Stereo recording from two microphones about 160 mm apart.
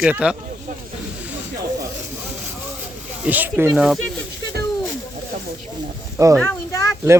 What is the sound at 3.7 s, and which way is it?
Speech, centre (ahead or behind).